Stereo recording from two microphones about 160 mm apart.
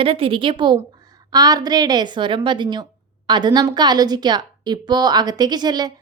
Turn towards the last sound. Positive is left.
turn(degrees=-25)  # may be behind; listen again after turning